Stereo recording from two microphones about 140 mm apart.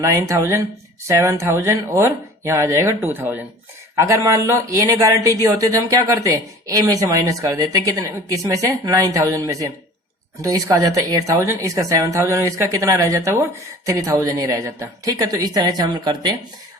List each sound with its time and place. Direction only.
0.0 s a woman's voice: 20° right (ahead or behind)